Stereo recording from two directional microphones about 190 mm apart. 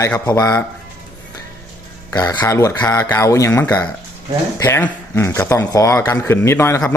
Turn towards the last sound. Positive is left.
turn(degrees=15)  # may be behind; listen again after turning